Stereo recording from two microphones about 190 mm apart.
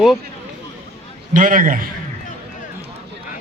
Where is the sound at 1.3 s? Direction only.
45° right (ahead or behind).